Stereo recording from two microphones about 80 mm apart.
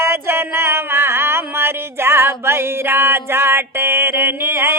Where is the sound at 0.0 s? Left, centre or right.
Right.